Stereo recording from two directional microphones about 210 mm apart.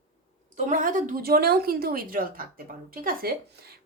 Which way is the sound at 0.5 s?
35° right (ahead or behind).